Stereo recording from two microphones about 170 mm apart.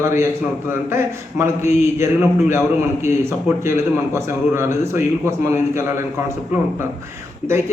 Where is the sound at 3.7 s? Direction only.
15° right (ahead or behind).